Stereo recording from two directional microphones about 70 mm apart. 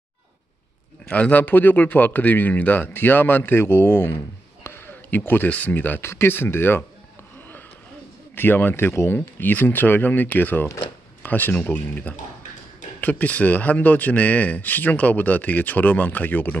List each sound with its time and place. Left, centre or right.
1.0 s speech: left
8.4 s speech: left